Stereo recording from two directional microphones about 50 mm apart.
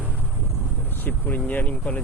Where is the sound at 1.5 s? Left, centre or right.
Left.